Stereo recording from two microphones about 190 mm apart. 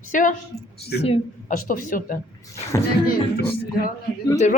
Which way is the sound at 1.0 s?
30° left (ahead or behind).